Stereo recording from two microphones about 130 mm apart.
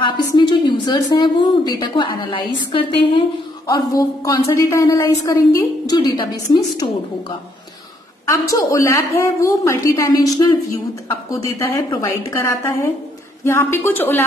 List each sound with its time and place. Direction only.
0.0 s a woman's voice: 35° left (ahead or behind)
3.6 s a woman's voice: 25° left (ahead or behind)
8.3 s a woman's voice: 20° left (ahead or behind)